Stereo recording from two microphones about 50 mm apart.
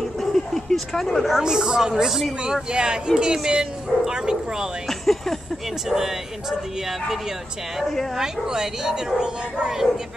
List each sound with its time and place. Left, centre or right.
0.2 s a sound: centre
1.4 s speech: centre
2.0 s speech: centre
2.4 s speech: centre
4.8 s speech: centre
5.9 s speech: centre
8.2 s speech: centre